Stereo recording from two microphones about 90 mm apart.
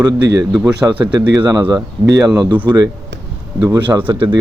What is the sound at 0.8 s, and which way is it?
Speech, 15° right (ahead or behind).